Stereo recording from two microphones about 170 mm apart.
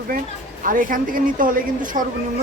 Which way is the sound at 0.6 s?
55° right (ahead or behind).